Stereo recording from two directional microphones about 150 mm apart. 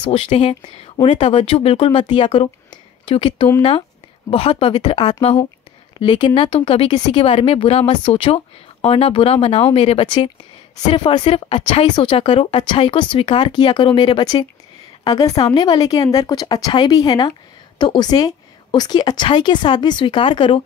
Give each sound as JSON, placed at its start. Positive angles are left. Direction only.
{"t": 0.0, "sound": "a woman's voice", "side_deg": 40}